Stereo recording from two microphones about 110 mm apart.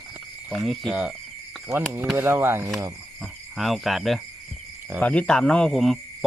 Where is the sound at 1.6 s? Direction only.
20° right (ahead or behind).